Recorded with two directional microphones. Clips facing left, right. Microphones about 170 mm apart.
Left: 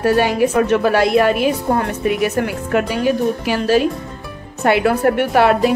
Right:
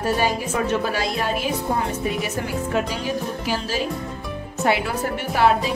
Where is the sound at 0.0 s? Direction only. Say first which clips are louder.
Left 8 dB; 70° left (ahead or behind).